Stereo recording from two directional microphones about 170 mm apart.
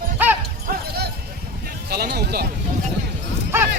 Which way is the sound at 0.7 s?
60° right (ahead or behind).